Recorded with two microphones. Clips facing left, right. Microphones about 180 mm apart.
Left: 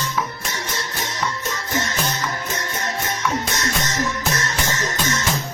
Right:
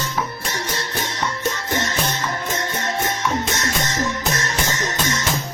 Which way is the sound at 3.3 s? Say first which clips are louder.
Right 1 dB; 30° right (ahead or behind).